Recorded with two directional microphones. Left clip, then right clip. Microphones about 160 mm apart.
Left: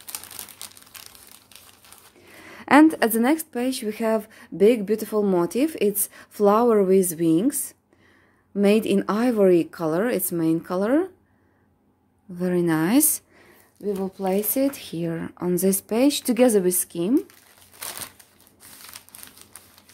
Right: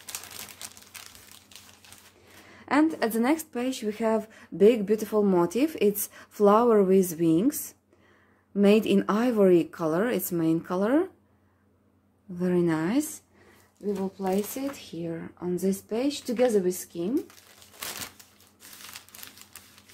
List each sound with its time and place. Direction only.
0.6 s crumpling: 25° left (ahead or behind)
2.4 s a sound: 90° left; by 3.0 s 70° left (ahead or behind)
3.0 s a woman's voice: 35° left (ahead or behind)
12.4 s a woman's voice: 25° left (ahead or behind)
12.6 s speech: 40° left (ahead or behind)
14.1 s speech: 90° left
18.9 s crumpling: centre (ahead or behind)